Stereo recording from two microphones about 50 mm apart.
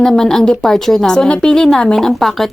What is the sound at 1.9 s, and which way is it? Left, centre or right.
Speech, centre.